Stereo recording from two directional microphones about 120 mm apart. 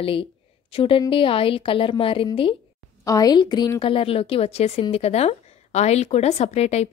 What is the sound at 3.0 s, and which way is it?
A woman's voice, 30° left (ahead or behind).